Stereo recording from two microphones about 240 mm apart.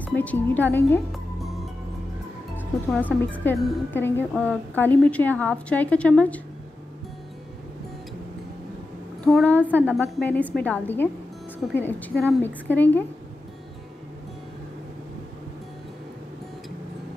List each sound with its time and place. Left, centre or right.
0.0 s speech: centre
2.5 s a woman's voice: centre
9.2 s speech: centre